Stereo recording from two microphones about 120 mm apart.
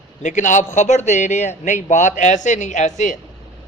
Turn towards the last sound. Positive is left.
turn(degrees=90)